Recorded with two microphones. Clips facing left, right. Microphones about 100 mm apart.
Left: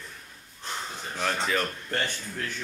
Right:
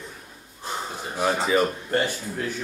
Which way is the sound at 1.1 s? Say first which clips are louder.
Right 6 dB; 10° right (ahead or behind).